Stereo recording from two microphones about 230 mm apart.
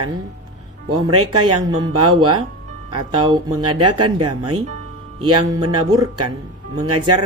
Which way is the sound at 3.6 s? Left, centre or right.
Right.